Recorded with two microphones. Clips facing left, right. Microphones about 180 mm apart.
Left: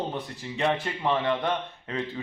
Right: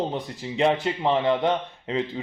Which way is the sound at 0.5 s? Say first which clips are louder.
Right 5 dB; 20° right (ahead or behind).